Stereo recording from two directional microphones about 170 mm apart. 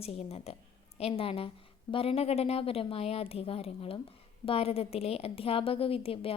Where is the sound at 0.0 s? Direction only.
35° left (ahead or behind).